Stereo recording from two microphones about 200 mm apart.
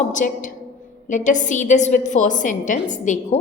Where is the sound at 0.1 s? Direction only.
40° left (ahead or behind).